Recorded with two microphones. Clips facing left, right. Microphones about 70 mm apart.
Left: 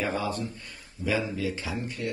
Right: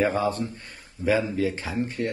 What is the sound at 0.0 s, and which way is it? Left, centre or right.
Speech, right.